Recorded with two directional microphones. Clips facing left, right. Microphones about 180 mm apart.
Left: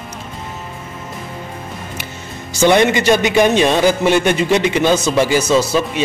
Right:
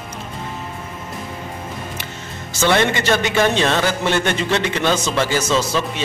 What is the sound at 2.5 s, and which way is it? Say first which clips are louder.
A man's voice: left 5 dB; 15° left (ahead or behind).